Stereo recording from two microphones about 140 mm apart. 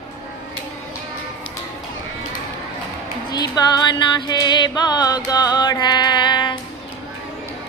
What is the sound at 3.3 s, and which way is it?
Music, 30° left (ahead or behind).